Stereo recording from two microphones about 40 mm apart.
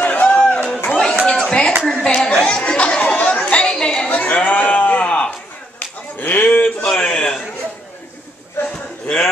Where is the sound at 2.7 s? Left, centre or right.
Left.